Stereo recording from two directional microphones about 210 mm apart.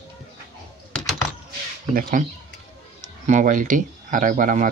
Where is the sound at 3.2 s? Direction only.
35° right (ahead or behind).